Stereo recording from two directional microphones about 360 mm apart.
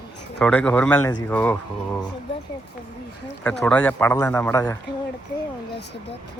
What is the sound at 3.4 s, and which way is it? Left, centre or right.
A man's voice, centre.